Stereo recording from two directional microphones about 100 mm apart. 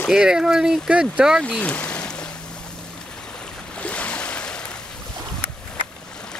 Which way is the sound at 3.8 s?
15° left (ahead or behind).